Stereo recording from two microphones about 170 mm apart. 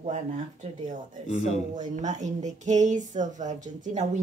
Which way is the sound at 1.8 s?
45° right (ahead or behind).